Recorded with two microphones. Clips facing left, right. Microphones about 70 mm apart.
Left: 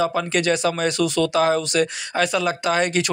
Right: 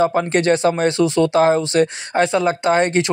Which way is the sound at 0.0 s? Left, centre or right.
Right.